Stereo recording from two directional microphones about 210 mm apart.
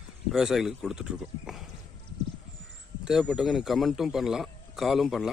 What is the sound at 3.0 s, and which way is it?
Speech, centre (ahead or behind).